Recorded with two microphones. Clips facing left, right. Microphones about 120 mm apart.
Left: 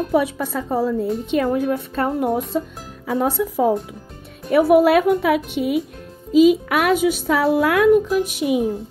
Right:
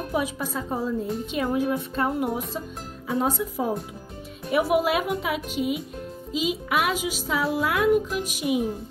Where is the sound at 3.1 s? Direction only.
75° left (ahead or behind).